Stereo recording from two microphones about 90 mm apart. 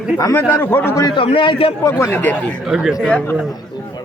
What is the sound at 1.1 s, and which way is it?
Speech, 75° left (ahead or behind).